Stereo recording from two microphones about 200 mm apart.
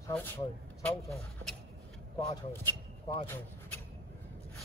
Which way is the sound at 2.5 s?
10° left (ahead or behind).